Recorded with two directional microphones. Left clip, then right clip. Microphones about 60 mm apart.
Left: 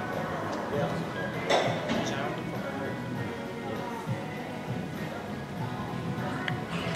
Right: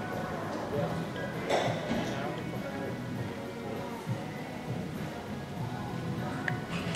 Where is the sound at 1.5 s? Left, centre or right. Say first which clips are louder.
Left 4 dB; centre.